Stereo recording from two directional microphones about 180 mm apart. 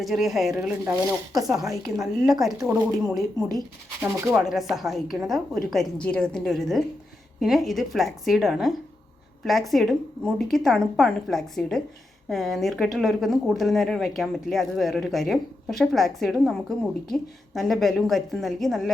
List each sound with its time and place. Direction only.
0.0 s a woman's voice: centre (ahead or behind)
0.9 s a woman's voice: 20° right (ahead or behind)
4.0 s speech: 15° right (ahead or behind)
4.4 s a woman's voice: centre (ahead or behind)